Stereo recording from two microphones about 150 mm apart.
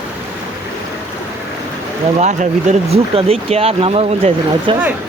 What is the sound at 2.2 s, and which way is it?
Speech, 50° right (ahead or behind).